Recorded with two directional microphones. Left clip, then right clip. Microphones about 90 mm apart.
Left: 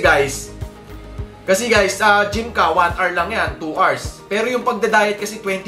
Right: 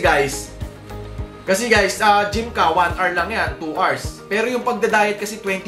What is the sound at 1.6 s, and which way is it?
Speech, 15° left (ahead or behind).